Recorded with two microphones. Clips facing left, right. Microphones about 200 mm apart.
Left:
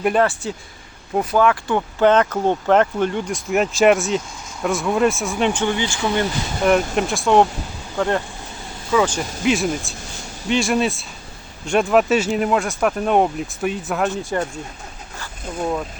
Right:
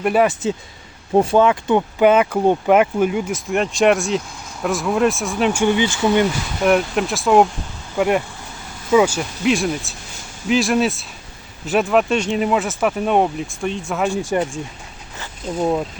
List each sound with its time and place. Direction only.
0.0 s speech: 5° right (ahead or behind)
1.1 s speech: 30° right (ahead or behind)
6.7 s speech: centre (ahead or behind)
7.9 s speech: 15° right (ahead or behind)
14.3 s speech: 15° right (ahead or behind)